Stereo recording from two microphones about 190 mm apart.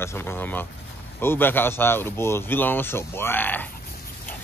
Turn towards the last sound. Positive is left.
turn(degrees=10)  # may be behind; listen again after turning